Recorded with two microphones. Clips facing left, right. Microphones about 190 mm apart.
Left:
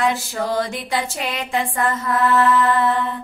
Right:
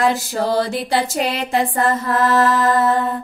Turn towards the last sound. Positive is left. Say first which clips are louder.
# right 3 dB
turn(degrees=-40)  # may be behind; listen again after turning